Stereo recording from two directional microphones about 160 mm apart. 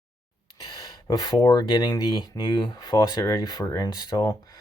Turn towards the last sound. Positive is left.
turn(degrees=25)  # may be behind; listen again after turning